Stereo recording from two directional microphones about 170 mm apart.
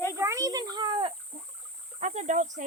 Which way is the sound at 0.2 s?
20° right (ahead or behind).